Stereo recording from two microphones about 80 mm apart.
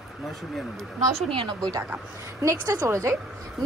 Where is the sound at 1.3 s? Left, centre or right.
Right.